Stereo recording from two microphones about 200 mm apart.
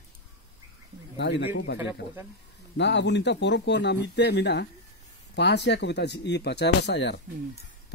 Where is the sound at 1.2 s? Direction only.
55° left (ahead or behind).